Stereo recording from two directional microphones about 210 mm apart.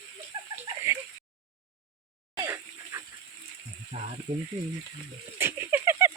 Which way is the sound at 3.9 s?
35° right (ahead or behind).